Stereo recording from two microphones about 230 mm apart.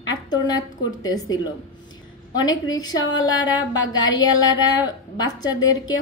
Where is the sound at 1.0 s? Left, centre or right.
Centre.